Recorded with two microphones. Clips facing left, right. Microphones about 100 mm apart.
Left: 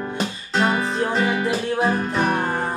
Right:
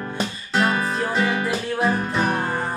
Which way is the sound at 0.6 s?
30° left (ahead or behind).